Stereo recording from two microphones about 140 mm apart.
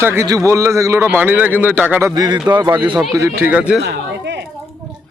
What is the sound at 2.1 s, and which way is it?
A man's voice, 25° right (ahead or behind).